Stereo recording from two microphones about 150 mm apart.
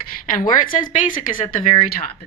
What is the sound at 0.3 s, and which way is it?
A woman's voice, 65° left (ahead or behind).